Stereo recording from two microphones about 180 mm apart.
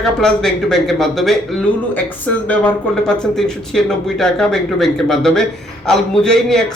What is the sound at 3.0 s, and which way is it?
Speech, centre (ahead or behind).